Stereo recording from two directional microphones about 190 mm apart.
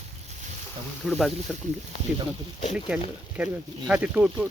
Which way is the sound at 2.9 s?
5° right (ahead or behind).